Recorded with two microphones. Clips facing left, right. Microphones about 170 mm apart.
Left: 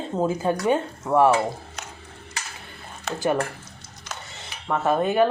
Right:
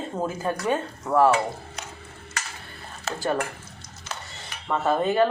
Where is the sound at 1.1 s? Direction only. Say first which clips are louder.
Left 2 dB; 10° left (ahead or behind).